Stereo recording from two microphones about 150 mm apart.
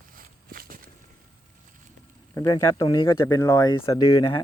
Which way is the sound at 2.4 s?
20° left (ahead or behind).